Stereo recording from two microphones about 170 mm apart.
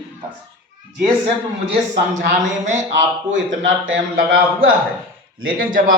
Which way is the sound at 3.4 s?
90° right.